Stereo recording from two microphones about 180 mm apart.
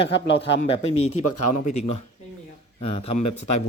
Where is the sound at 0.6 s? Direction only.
40° left (ahead or behind).